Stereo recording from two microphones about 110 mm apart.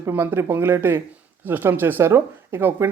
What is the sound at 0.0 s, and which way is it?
Speech, 20° right (ahead or behind).